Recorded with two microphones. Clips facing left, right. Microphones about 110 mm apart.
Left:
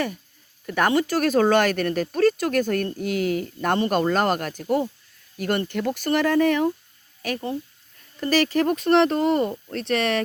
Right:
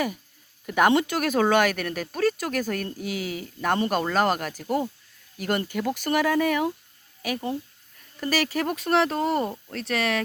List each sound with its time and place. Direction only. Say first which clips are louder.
0.6 s speech: right 1 dB; 15° right (ahead or behind)
3.0 s speech: left 7 dB; 50° left (ahead or behind)
3.6 s speech: left 1 dB; centre (ahead or behind)